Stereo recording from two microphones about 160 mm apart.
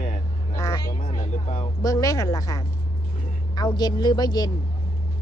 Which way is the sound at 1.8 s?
20° left (ahead or behind).